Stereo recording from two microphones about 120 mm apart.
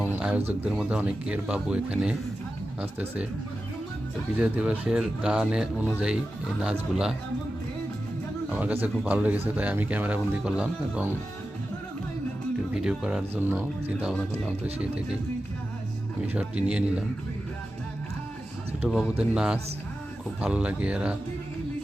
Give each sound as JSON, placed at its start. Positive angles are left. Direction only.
{"t": 0.0, "sound": "a sound", "side_deg": -15}
{"t": 0.6, "sound": "speech", "side_deg": -10}
{"t": 4.4, "sound": "speech", "side_deg": -15}
{"t": 8.5, "sound": "speech", "side_deg": -15}
{"t": 12.7, "sound": "speech", "side_deg": -5}
{"t": 13.3, "sound": "speech", "side_deg": -15}
{"t": 16.3, "sound": "speech", "side_deg": -10}
{"t": 19.3, "sound": "speech", "side_deg": -5}